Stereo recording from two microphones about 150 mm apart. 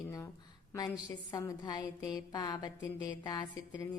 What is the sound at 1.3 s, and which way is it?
Speech, 25° left (ahead or behind).